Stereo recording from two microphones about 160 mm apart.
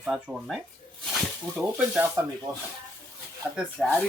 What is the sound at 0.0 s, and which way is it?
Speech, centre (ahead or behind).